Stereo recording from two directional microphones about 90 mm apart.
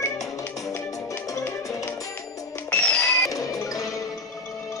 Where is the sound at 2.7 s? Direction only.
10° left (ahead or behind).